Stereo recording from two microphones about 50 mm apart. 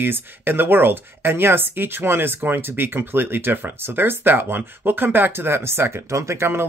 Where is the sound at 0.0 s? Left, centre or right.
Right.